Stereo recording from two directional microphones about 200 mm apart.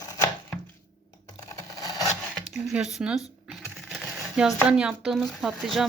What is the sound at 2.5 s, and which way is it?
Speech, centre (ahead or behind).